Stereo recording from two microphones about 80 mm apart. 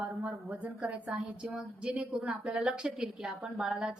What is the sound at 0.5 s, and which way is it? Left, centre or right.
A woman's voice, centre.